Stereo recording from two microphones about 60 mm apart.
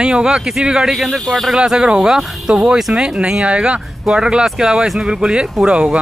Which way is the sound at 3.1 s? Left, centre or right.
Centre.